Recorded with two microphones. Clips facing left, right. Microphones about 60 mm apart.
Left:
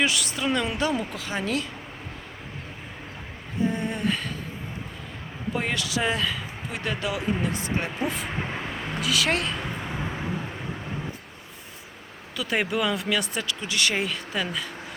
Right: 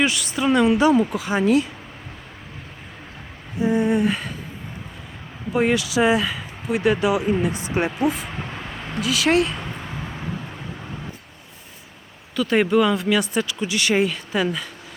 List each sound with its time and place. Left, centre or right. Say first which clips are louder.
0.0 s speech: right 4 dB; centre
3.6 s speech: right 7 dB; centre
5.5 s speech: right 9 dB; centre
7.9 s speech: right 6 dB; centre
8.4 s a sound: left 1 dB; centre
12.4 s speech: right 8 dB; centre